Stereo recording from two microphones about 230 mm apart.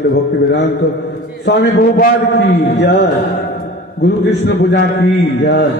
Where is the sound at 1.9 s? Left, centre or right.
Left.